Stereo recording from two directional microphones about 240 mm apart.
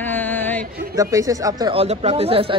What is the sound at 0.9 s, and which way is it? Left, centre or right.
Speech, centre.